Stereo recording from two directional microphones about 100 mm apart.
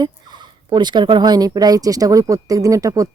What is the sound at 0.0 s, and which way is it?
A woman's voice, 50° right (ahead or behind).